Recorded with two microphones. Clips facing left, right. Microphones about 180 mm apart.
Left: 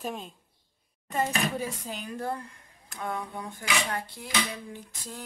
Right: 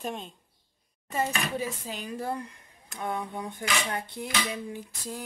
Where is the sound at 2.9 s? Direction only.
20° right (ahead or behind).